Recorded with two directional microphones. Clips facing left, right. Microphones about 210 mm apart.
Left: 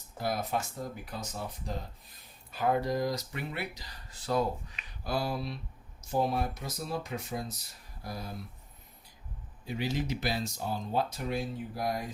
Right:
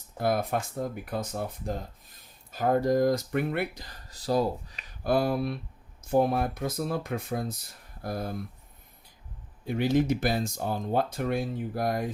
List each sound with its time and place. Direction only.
0.2 s speech: 55° right (ahead or behind); by 4.9 s 40° right (ahead or behind)
5.0 s speech: 55° right (ahead or behind)
9.6 s speech: 55° right (ahead or behind)